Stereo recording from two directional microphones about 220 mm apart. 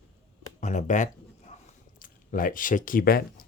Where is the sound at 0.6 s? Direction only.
30° left (ahead or behind).